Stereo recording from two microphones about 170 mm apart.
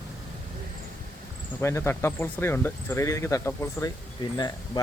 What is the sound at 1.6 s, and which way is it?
Speech, 15° left (ahead or behind).